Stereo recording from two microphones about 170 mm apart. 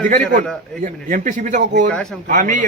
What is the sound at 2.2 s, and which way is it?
Speech, 50° right (ahead or behind).